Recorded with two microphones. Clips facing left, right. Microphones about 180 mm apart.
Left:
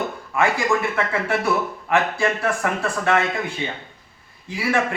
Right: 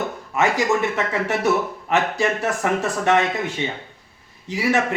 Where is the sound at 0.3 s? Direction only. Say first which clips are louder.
Right 1 dB; 20° right (ahead or behind).